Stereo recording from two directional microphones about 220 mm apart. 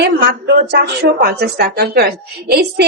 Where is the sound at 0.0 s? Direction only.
50° right (ahead or behind).